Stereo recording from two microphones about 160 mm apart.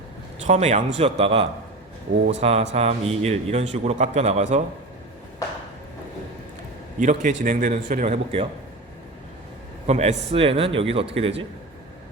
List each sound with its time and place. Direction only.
0.4 s a man's voice: 45° right (ahead or behind)
7.0 s a man's voice: 50° right (ahead or behind)
9.8 s a man's voice: 45° right (ahead or behind)